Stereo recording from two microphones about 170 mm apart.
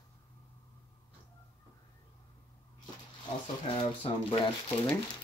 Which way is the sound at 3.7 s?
30° left (ahead or behind).